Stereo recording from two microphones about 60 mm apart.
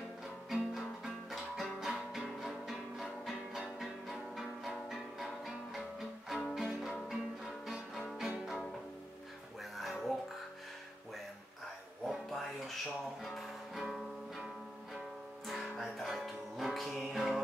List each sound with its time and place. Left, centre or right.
0.5 s music: centre
9.6 s music: centre
12.1 s music: centre